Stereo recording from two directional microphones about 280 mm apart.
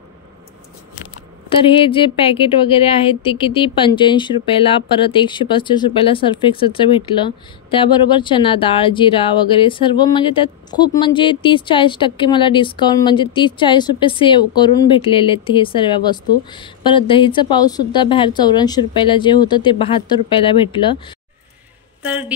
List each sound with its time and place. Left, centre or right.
1.6 s a woman's voice: centre
22.0 s speech: centre